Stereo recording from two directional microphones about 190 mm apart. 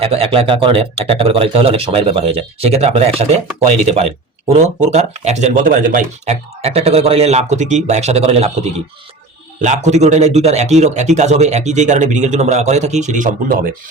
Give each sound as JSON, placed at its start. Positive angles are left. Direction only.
{"t": 0.0, "sound": "speech", "side_deg": -30}
{"t": 9.6, "sound": "speech", "side_deg": -40}